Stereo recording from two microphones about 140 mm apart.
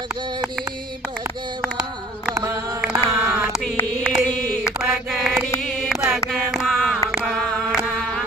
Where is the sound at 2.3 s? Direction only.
25° right (ahead or behind).